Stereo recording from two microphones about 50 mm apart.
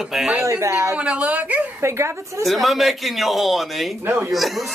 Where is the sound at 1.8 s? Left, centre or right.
Right.